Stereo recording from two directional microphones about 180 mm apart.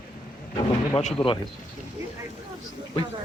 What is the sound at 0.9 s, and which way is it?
Speech, 30° left (ahead or behind).